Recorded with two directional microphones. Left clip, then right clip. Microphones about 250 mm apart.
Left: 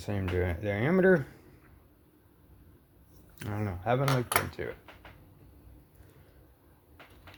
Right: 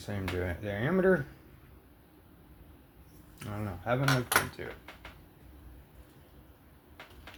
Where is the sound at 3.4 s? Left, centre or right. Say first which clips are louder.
Left 3 dB; left.